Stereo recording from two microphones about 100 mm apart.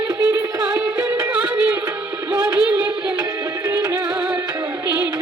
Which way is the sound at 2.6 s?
15° right (ahead or behind).